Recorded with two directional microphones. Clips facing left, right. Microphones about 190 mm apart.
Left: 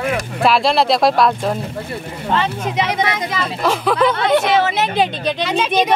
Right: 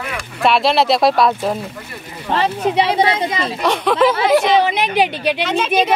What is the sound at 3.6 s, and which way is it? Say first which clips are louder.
Speech: right 1 dB; centre (ahead or behind).